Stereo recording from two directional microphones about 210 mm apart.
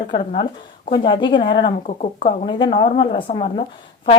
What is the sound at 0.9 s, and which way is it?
Speech, 20° left (ahead or behind).